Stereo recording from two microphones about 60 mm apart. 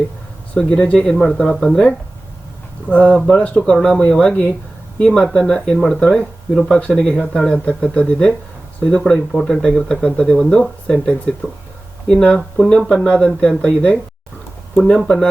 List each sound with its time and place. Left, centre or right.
0.5 s speech: centre
2.9 s speech: left